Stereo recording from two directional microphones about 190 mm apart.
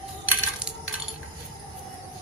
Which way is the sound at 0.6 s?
5° right (ahead or behind).